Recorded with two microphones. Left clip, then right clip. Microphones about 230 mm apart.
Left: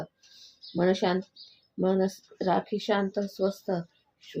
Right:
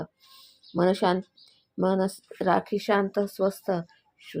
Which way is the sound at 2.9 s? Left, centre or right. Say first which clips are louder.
Right 5 dB; right.